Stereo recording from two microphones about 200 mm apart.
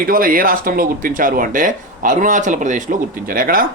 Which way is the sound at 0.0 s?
45° right (ahead or behind).